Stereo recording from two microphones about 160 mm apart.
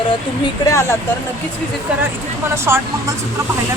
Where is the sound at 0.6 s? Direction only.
15° left (ahead or behind).